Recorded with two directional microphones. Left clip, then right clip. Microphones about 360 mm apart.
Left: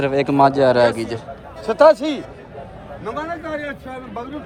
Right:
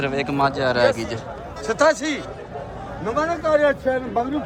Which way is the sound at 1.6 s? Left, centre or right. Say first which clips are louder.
Left 6 dB; centre.